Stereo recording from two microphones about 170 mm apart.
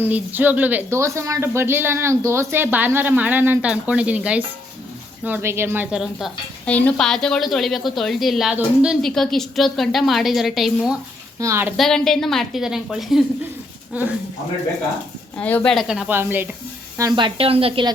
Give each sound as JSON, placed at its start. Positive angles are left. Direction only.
{"t": 0.0, "sound": "speech", "side_deg": -10}
{"t": 6.0, "sound": "a woman's voice", "side_deg": 0}
{"t": 11.3, "sound": "speech", "side_deg": -15}
{"t": 11.8, "sound": "a woman's voice", "side_deg": 0}
{"t": 15.4, "sound": "a woman's voice", "side_deg": 10}
{"t": 17.0, "sound": "speech", "side_deg": -25}